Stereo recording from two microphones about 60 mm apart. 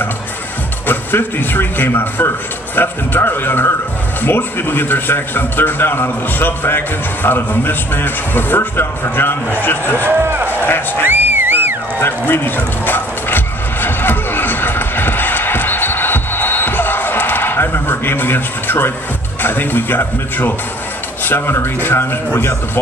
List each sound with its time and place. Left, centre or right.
0.8 s a man's voice: left
10.0 s a sound: right
10.6 s speech: left
11.1 s music: right
12.0 s a sound: left
19.4 s a man's voice: left